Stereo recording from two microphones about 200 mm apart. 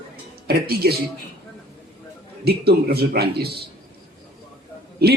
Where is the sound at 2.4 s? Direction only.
50° right (ahead or behind).